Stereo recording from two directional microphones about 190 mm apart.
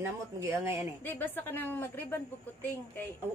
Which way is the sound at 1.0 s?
10° left (ahead or behind).